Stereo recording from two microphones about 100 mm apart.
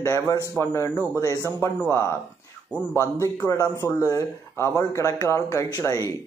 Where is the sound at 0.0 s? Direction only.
30° left (ahead or behind).